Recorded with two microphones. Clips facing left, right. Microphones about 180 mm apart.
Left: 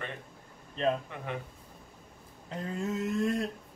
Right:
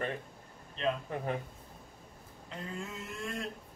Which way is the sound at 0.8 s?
40° left (ahead or behind).